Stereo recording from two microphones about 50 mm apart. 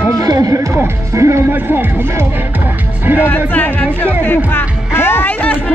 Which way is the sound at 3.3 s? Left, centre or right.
Left.